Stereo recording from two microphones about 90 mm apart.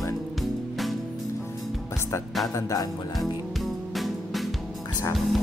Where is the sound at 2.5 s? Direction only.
40° left (ahead or behind).